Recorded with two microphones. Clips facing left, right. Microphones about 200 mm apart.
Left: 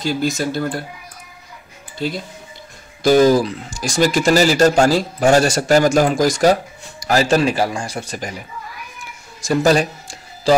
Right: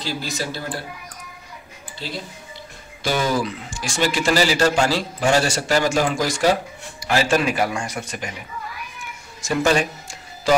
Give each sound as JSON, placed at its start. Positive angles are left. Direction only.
{"t": 0.0, "sound": "speech", "side_deg": 50}
{"t": 3.0, "sound": "speech", "side_deg": 40}
{"t": 9.4, "sound": "speech", "side_deg": 35}